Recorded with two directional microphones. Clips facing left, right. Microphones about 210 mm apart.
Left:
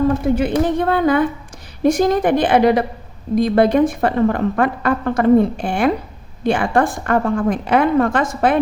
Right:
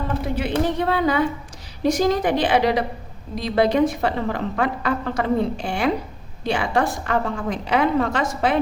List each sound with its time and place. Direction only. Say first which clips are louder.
0.3 s a woman's voice: left 5 dB; 50° left (ahead or behind)